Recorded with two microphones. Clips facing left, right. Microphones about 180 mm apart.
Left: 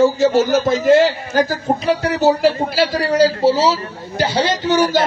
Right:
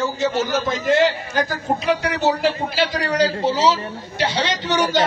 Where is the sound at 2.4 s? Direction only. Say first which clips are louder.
Left 5 dB; 5° left (ahead or behind).